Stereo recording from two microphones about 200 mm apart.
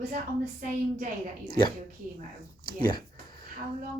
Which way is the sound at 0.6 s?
40° right (ahead or behind).